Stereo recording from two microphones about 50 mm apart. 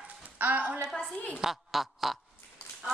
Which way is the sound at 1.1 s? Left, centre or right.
Left.